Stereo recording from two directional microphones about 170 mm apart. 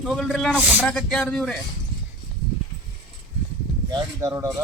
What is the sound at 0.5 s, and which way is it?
Speech, 10° right (ahead or behind).